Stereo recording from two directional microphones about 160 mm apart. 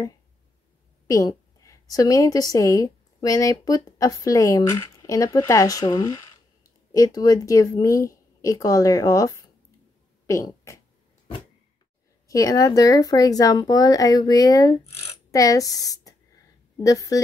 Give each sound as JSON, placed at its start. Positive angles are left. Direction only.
{"t": 1.0, "sound": "a woman's voice", "side_deg": 20}
{"t": 12.3, "sound": "speech", "side_deg": 20}